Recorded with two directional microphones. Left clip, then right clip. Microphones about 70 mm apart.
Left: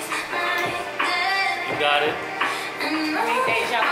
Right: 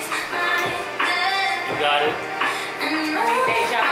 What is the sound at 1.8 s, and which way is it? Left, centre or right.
Music, left.